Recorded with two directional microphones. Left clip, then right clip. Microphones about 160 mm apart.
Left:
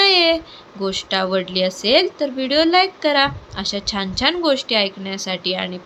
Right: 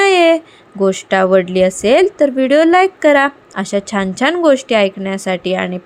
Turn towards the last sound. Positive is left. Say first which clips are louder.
# right 6 dB
turn(degrees=-35)  # may be behind; listen again after turning